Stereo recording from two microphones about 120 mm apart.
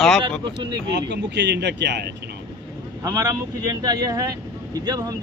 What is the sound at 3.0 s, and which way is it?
Speech, 30° right (ahead or behind).